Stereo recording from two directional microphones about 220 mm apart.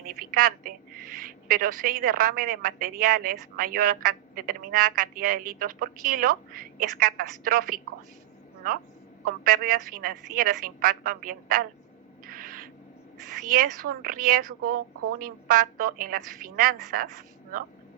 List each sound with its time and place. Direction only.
0.1 s a woman's voice: 40° right (ahead or behind)
12.2 s owl: 40° right (ahead or behind)
13.2 s a woman's voice: 40° right (ahead or behind)